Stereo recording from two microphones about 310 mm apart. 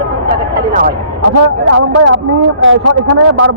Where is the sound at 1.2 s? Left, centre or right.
Right.